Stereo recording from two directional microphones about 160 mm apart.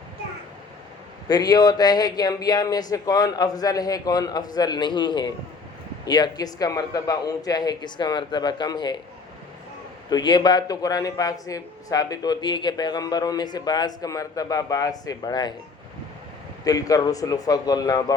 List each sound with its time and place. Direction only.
1.3 s a man's voice: 25° left (ahead or behind)
10.1 s a man's voice: 25° left (ahead or behind)
16.6 s a man's voice: 20° left (ahead or behind)